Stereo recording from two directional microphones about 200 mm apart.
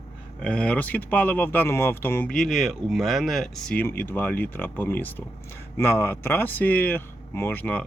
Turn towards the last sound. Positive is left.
turn(degrees=10)  # may be behind; listen again after turning